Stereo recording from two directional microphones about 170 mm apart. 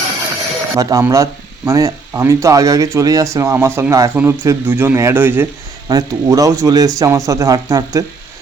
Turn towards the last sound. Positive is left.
turn(degrees=-20)  # may be behind; listen again after turning